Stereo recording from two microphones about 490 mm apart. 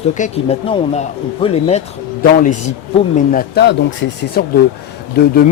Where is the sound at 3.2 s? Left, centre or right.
Centre.